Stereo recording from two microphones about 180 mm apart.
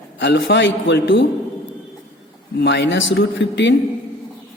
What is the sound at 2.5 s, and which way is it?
A man's voice, 70° left (ahead or behind).